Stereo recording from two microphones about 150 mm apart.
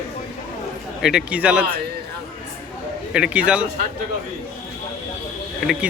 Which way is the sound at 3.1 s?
5° right (ahead or behind).